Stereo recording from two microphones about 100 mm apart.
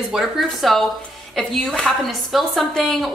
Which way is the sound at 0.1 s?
Centre (ahead or behind).